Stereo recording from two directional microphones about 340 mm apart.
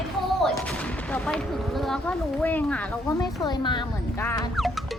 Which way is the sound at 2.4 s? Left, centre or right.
Centre.